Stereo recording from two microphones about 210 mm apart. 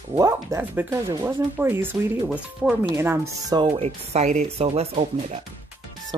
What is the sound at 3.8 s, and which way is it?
Speech, 30° right (ahead or behind).